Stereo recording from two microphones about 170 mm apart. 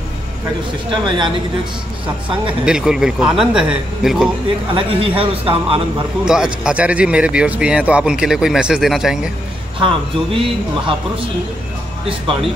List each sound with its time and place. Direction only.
1.0 s speech: 30° right (ahead or behind)
2.6 s speech: 5° right (ahead or behind)
4.7 s a man's voice: 35° right (ahead or behind)
6.2 s speech: 5° right (ahead or behind)
9.8 s speech: 30° right (ahead or behind)